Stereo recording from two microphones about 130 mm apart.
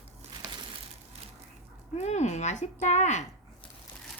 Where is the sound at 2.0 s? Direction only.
60° left (ahead or behind).